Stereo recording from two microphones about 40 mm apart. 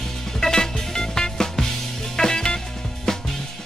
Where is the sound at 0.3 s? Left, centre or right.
Centre.